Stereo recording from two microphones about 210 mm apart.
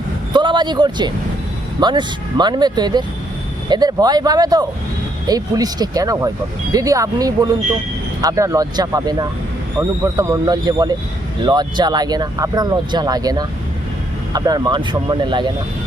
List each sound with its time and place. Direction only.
0.3 s a man's voice: 20° right (ahead or behind)